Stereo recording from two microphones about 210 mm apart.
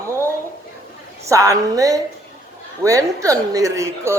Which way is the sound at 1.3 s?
15° right (ahead or behind).